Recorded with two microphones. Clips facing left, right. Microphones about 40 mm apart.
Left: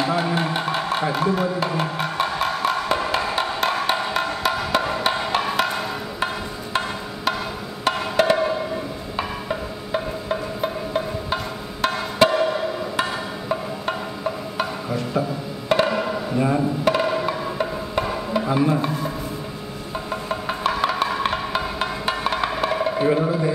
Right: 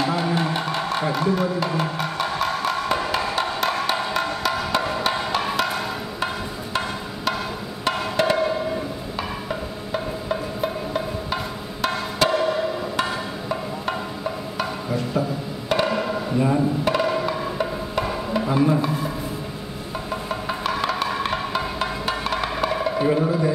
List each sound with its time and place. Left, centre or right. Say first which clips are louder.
0.0 s music: left 1 dB; centre
7.8 s wood block: left 2 dB; centre
9.1 s music: left 4 dB; centre
15.7 s wood block: left 2 dB; centre
16.3 s a sound: even; centre
16.8 s music: left 1 dB; centre
20.1 s music: left 1 dB; centre